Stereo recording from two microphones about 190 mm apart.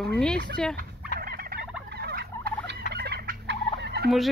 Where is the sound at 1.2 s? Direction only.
55° right (ahead or behind).